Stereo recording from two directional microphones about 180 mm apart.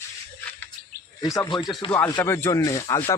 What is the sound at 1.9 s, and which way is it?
Speech, 10° left (ahead or behind).